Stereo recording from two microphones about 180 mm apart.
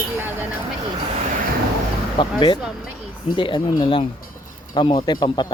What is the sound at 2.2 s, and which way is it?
Speech, 25° left (ahead or behind).